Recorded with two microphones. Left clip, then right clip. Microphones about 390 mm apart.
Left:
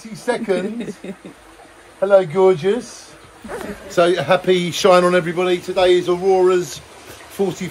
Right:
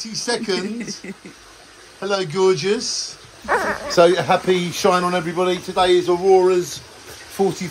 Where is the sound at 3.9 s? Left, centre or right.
Centre.